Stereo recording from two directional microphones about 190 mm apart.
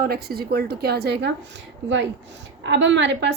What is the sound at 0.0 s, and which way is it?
A woman's voice, 55° right (ahead or behind).